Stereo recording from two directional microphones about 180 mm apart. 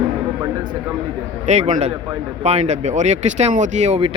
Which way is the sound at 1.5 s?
40° right (ahead or behind).